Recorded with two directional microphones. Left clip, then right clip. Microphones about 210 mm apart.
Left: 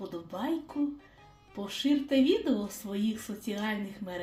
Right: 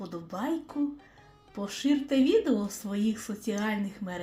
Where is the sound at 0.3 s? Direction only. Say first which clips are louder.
Right 2 dB; 30° right (ahead or behind).